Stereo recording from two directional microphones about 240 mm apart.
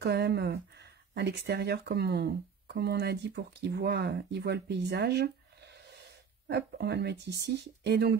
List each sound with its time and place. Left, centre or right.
0.0 s speech: right
6.4 s speech: right